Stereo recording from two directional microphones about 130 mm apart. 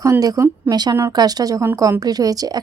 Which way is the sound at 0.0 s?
25° right (ahead or behind).